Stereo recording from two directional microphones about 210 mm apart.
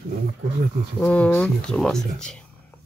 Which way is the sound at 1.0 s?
5° left (ahead or behind).